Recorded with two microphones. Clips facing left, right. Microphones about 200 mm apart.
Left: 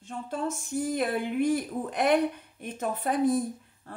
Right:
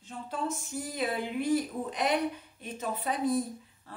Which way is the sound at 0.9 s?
55° left (ahead or behind).